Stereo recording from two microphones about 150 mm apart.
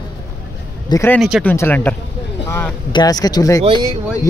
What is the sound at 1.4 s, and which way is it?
Speech, 15° left (ahead or behind).